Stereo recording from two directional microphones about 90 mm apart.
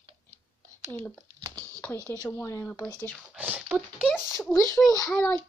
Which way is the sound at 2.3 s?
30° left (ahead or behind).